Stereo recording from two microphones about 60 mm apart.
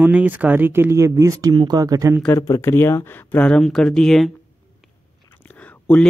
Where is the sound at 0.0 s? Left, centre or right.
Right.